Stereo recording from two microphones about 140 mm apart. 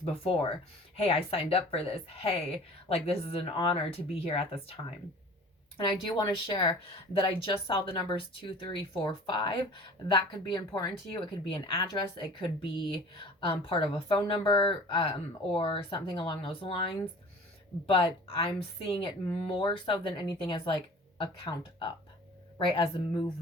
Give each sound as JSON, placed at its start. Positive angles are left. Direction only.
{"t": 0.0, "sound": "a woman's voice", "side_deg": 40}